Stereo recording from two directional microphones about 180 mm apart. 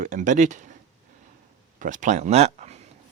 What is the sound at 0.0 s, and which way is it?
Speech, 45° right (ahead or behind).